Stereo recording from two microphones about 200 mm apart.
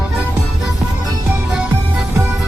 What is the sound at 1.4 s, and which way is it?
Music, 5° right (ahead or behind).